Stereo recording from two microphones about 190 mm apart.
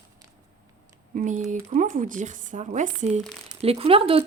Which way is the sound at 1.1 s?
40° right (ahead or behind).